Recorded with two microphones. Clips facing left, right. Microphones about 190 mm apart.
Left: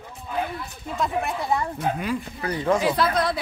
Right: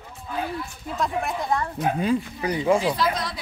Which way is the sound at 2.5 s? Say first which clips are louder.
Right 2 dB; 10° right (ahead or behind).